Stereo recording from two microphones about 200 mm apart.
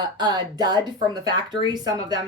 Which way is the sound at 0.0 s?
20° right (ahead or behind).